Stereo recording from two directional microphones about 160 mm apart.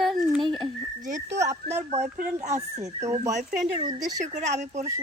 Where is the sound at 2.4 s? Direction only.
45° right (ahead or behind).